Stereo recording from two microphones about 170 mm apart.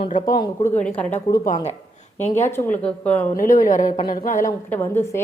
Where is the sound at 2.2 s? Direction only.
45° left (ahead or behind).